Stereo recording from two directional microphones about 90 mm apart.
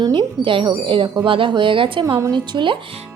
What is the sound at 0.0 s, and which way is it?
Speech, 60° right (ahead or behind).